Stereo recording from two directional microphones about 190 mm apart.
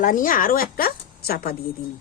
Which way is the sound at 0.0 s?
45° left (ahead or behind).